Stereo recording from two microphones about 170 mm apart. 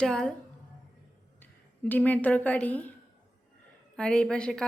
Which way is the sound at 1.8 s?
10° left (ahead or behind).